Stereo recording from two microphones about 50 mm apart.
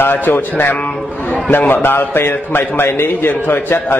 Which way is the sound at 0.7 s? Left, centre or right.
Left.